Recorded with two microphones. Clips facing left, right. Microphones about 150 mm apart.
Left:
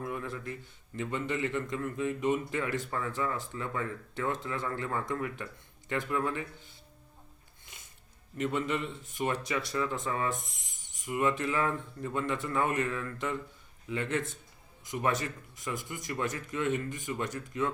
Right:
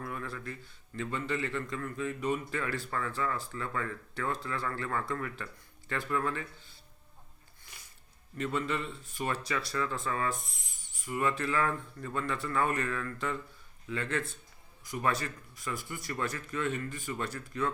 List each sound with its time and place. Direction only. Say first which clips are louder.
0.0 s a man's voice: left 3 dB; 20° left (ahead or behind)
7.6 s music: even; 20° left (ahead or behind)
8.4 s a man's voice: left 2 dB; 20° left (ahead or behind)